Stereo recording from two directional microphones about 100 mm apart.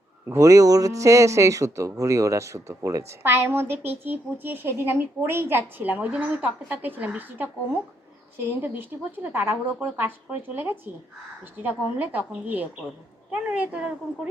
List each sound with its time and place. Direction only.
0.3 s a woman's voice: 30° right (ahead or behind); by 13.9 s 10° right (ahead or behind)